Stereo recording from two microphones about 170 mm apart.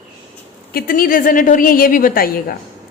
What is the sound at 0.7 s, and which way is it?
A woman's voice, 60° left (ahead or behind).